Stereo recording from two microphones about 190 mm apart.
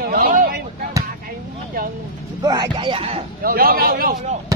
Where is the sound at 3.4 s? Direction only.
50° right (ahead or behind).